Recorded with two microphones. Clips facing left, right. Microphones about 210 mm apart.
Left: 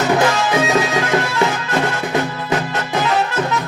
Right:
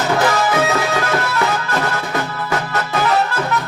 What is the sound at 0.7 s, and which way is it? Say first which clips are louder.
Music: left 2 dB; 20° left (ahead or behind).